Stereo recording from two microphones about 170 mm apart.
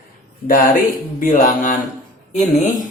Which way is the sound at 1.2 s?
50° left (ahead or behind).